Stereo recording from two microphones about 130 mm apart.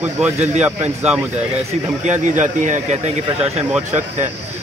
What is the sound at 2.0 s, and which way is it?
Speech, 65° right (ahead or behind).